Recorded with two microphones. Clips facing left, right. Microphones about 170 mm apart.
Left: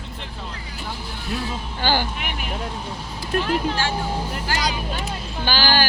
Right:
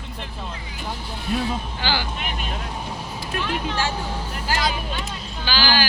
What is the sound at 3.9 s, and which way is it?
Speech, 10° left (ahead or behind).